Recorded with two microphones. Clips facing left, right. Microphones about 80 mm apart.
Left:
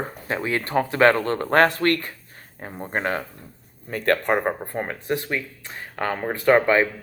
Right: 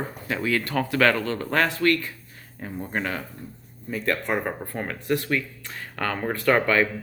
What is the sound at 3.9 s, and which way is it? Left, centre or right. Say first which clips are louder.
Speech: left 4 dB; left.